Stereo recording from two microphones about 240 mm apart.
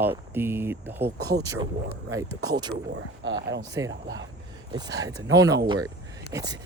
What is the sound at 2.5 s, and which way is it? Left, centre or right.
Speech, centre.